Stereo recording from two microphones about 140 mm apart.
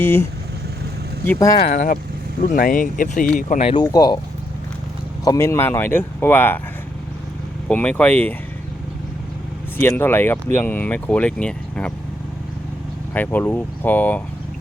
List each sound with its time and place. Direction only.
0.0 s speech: 15° left (ahead or behind)
1.7 s speech: 70° left (ahead or behind)
2.4 s speech: 85° left
3.6 s speech: 35° left (ahead or behind)
5.2 s speech: 20° left (ahead or behind)
7.7 s speech: 10° left (ahead or behind)
10.0 s speech: 15° left (ahead or behind)
13.1 s speech: 10° left (ahead or behind)